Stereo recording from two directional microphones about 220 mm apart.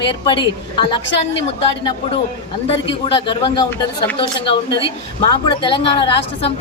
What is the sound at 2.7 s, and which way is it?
A woman's voice, 25° left (ahead or behind).